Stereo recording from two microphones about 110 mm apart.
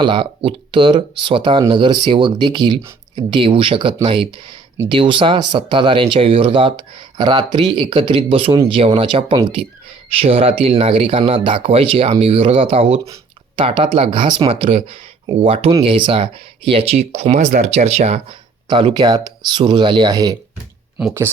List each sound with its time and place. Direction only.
0.0 s speech: 50° right (ahead or behind)
10.2 s speech: 65° right (ahead or behind)
15.8 s speech: 50° right (ahead or behind); by 18.3 s 70° right (ahead or behind)
18.7 s speech: 45° right (ahead or behind)
21.0 s speech: 5° right (ahead or behind)